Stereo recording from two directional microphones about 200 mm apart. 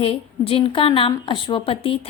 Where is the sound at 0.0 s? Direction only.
30° left (ahead or behind).